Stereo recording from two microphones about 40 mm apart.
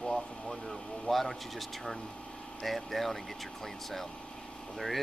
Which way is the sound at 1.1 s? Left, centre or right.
Centre.